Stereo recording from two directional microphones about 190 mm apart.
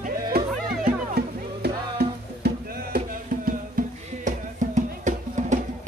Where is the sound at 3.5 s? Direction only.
45° right (ahead or behind).